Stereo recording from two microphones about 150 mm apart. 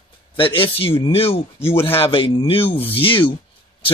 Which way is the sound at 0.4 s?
35° left (ahead or behind).